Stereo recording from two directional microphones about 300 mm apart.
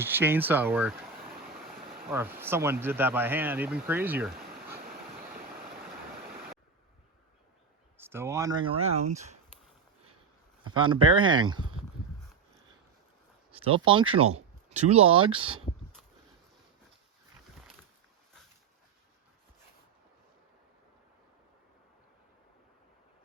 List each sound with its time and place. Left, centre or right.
0.0 s speech: centre
1.3 s a sound: right
2.0 s speech: centre
4.4 s a sound: right
7.9 s speech: centre
10.6 s speech: centre
13.7 s speech: centre